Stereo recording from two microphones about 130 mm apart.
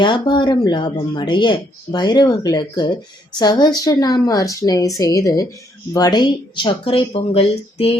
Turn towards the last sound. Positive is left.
turn(degrees=50)  # may be behind; listen again after turning